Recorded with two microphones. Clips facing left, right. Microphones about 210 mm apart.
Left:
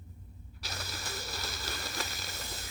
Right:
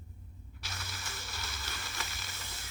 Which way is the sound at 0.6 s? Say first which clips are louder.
Left 4 dB; 35° left (ahead or behind).